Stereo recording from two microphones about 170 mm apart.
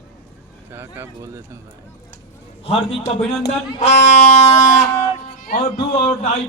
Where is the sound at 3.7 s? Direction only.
45° left (ahead or behind).